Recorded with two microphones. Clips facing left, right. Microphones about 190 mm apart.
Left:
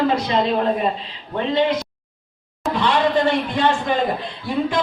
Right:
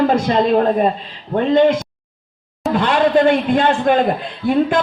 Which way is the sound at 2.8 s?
55° right (ahead or behind).